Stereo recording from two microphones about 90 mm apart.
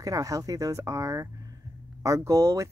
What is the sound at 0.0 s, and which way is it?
Speech, 40° right (ahead or behind).